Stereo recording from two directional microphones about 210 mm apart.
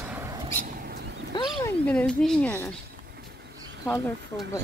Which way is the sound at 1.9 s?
5° left (ahead or behind).